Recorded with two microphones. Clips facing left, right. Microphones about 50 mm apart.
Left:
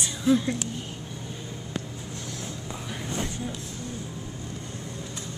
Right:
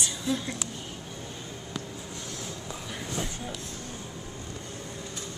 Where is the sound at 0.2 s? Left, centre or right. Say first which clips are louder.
Left 10 dB; centre.